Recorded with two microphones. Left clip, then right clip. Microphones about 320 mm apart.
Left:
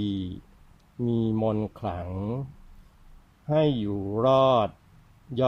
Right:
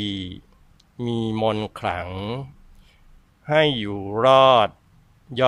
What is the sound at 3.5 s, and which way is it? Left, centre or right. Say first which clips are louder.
Speech: right 6 dB; right.